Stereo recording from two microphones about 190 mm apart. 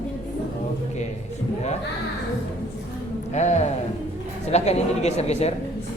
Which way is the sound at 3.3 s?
35° left (ahead or behind).